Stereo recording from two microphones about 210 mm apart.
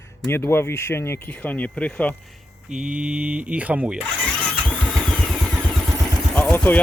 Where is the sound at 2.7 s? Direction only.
5° right (ahead or behind).